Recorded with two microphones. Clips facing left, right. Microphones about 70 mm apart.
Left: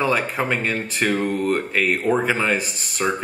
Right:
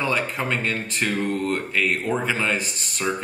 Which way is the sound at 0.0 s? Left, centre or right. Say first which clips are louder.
Left 3 dB; centre.